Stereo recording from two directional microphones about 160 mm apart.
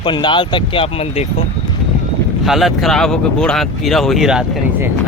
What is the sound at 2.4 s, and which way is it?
Speech, centre (ahead or behind).